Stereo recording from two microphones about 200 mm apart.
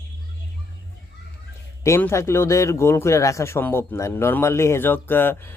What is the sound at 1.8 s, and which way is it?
A man's voice, 10° left (ahead or behind).